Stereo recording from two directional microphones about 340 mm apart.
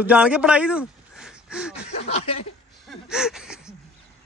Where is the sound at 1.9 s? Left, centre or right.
Centre.